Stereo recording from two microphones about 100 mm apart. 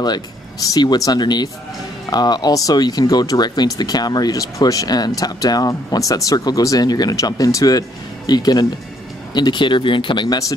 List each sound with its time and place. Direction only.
0.0 s speech: 40° left (ahead or behind)